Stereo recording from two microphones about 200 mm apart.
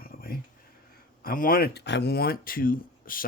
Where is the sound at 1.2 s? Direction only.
45° left (ahead or behind).